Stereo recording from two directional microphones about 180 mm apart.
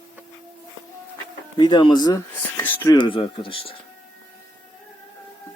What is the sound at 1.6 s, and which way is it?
Speech, 25° left (ahead or behind).